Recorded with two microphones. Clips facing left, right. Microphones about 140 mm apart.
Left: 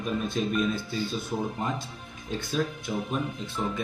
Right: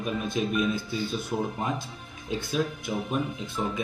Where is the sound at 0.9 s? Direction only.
Centre (ahead or behind).